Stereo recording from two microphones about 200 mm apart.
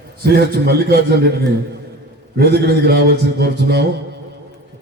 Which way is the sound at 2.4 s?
55° right (ahead or behind).